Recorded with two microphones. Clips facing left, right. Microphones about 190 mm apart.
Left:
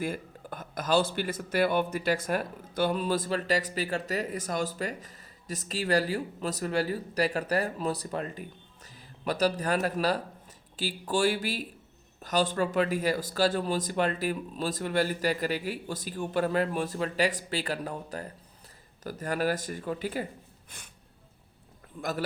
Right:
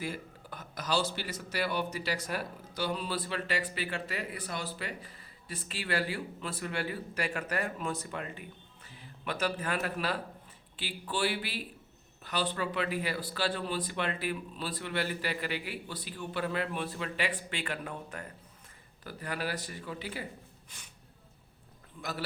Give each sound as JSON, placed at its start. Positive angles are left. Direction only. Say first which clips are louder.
{"t": 0.0, "sound": "speech", "louder": "left 5 dB", "side_deg": 50}
{"t": 22.0, "sound": "speech", "louder": "left 7 dB", "side_deg": 55}